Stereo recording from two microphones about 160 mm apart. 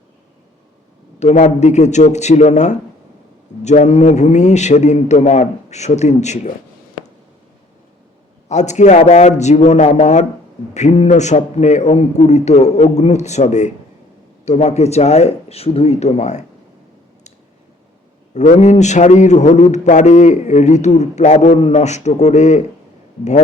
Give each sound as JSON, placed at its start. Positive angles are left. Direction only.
{"t": 1.2, "sound": "a man's voice", "side_deg": 45}
{"t": 8.4, "sound": "a man's voice", "side_deg": 45}
{"t": 18.3, "sound": "a man's voice", "side_deg": 45}